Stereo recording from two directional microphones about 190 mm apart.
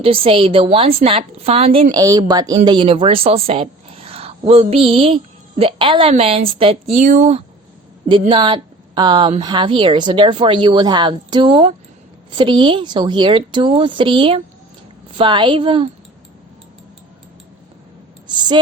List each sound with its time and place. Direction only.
0.0 s a woman's voice: 30° right (ahead or behind)
8.3 s a woman's voice: 25° right (ahead or behind)
18.3 s a sound: 25° right (ahead or behind)